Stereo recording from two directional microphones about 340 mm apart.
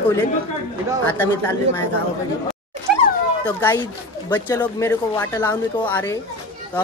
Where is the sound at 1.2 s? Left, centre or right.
Centre.